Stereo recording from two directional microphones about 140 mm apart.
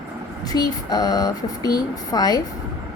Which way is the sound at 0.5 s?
30° left (ahead or behind).